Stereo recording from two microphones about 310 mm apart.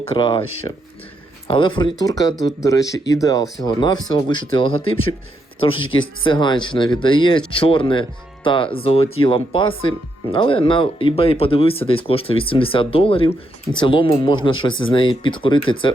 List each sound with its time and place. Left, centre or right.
0.1 s speech: centre